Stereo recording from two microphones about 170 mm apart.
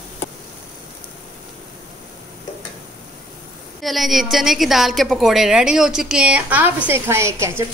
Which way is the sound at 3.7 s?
Centre (ahead or behind).